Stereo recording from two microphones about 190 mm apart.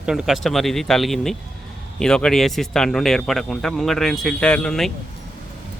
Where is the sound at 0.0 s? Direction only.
Centre (ahead or behind).